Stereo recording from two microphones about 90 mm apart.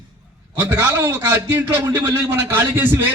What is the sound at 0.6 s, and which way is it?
A man's voice, 20° right (ahead or behind).